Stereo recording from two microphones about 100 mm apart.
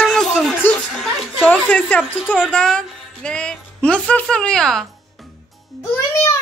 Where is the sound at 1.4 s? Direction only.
15° left (ahead or behind).